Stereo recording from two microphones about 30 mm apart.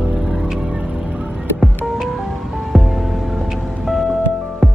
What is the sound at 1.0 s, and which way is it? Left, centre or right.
Music, right.